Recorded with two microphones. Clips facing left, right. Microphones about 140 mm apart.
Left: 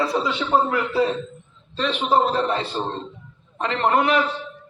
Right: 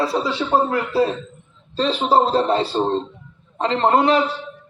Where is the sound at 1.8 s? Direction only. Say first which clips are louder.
Right 3 dB; 35° right (ahead or behind).